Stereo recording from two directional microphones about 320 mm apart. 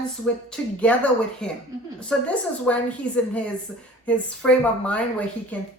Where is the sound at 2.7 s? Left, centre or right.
Centre.